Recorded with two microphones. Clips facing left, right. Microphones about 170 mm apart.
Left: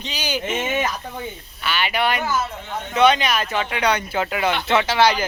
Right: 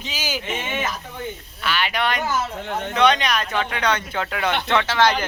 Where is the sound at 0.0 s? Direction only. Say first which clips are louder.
Left 2 dB; 5° right (ahead or behind).